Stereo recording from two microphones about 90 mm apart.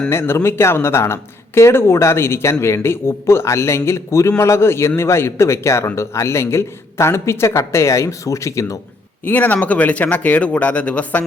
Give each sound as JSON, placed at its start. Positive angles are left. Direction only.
{"t": 0.1, "sound": "a man's voice", "side_deg": 30}
{"t": 9.2, "sound": "speech", "side_deg": 20}